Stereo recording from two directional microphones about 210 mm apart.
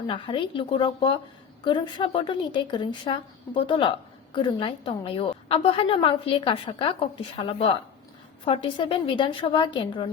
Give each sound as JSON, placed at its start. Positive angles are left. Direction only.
{"t": 0.1, "sound": "a woman's voice", "side_deg": 25}